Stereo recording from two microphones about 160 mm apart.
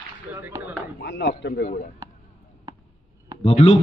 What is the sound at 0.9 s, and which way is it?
Speech, 90° left.